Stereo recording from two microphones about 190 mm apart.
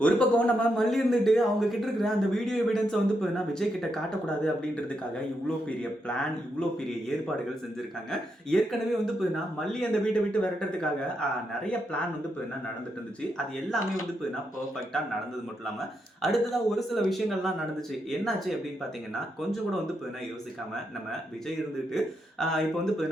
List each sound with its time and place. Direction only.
0.0 s a man's voice: 5° left (ahead or behind)
5.6 s a man's voice: 5° left (ahead or behind)
8.1 s a man's voice: 5° left (ahead or behind)
13.7 s a man's voice: centre (ahead or behind)
16.2 s a man's voice: centre (ahead or behind)
21.9 s a man's voice: centre (ahead or behind)